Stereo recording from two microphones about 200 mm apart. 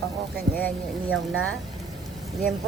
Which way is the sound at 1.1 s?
90° right.